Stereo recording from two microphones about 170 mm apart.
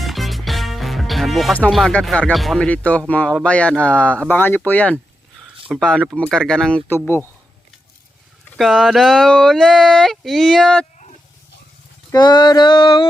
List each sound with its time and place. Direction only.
0.0 s music: centre (ahead or behind)
1.5 s speech: 5° left (ahead or behind)
8.5 s speech: centre (ahead or behind)
12.1 s male singing: 25° left (ahead or behind)